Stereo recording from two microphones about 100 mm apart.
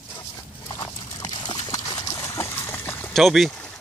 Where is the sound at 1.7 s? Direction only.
35° left (ahead or behind).